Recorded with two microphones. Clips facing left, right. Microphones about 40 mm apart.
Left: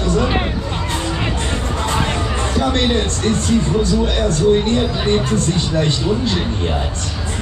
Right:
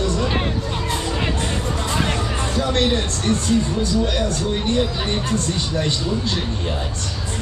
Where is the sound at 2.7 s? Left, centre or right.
Left.